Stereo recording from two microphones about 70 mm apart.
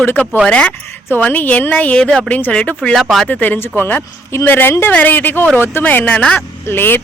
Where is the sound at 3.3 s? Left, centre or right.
Left.